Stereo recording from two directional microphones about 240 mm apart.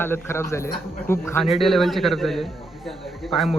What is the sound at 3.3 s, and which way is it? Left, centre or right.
Speech, centre.